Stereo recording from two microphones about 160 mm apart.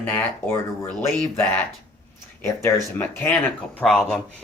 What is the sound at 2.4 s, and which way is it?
Speech, 15° left (ahead or behind).